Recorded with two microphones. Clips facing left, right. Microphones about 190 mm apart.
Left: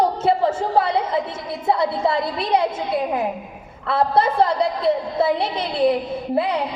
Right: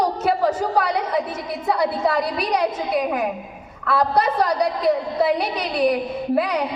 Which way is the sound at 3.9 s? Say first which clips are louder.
Left 1 dB; 25° left (ahead or behind).